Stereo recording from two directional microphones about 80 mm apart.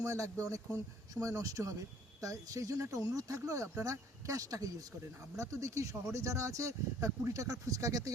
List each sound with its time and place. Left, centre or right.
0.0 s speech: right